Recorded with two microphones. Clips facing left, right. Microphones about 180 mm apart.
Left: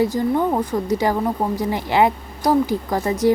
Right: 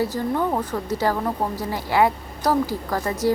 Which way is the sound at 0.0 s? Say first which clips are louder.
Left 4 dB; 15° left (ahead or behind).